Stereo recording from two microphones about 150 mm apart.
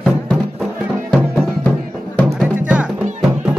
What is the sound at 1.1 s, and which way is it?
Music, centre (ahead or behind).